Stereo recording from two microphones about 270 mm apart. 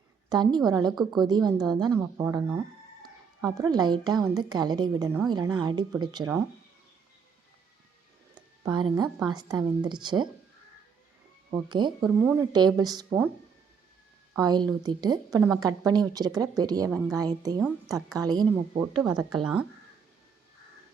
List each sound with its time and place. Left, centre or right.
0.3 s a woman's voice: centre
8.4 s a sound: centre
9.0 s a woman's voice: centre
11.5 s a woman's voice: centre
14.3 s a woman's voice: centre